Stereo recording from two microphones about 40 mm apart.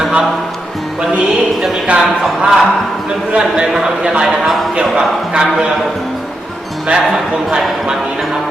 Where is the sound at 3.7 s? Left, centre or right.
Centre.